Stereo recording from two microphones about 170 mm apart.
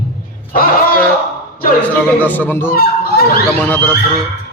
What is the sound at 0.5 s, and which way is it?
Speech, 60° left (ahead or behind).